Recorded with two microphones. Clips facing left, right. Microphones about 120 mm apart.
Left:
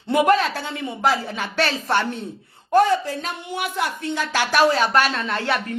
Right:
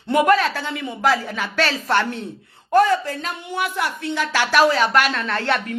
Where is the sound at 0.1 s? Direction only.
55° right (ahead or behind).